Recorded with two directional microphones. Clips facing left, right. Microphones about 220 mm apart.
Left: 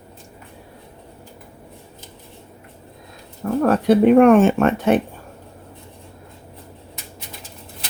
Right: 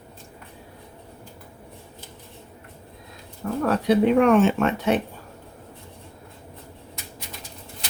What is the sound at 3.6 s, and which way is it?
Speech, 50° left (ahead or behind).